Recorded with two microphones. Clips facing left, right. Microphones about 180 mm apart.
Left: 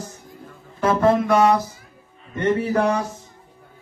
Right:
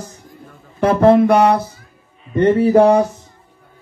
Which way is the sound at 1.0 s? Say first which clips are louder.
Right 6 dB; 65° right (ahead or behind).